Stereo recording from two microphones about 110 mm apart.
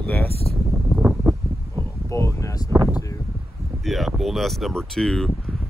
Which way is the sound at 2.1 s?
25° left (ahead or behind).